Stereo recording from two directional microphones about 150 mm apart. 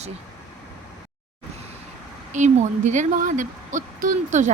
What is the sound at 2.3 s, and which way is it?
A woman's voice, 55° right (ahead or behind).